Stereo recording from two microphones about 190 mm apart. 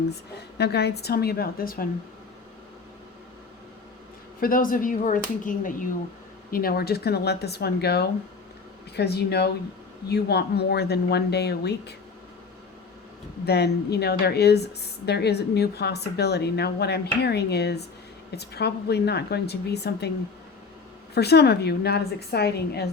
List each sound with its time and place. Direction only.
0.1 s speech: 60° left (ahead or behind)
4.4 s speech: 50° left (ahead or behind)
13.4 s speech: 60° left (ahead or behind)
21.2 s speech: 60° left (ahead or behind)